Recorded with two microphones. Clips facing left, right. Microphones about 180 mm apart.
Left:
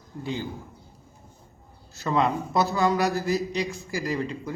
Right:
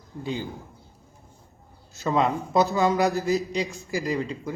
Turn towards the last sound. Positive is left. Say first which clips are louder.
# right 1 dB
turn(degrees=-15)  # may be behind; listen again after turning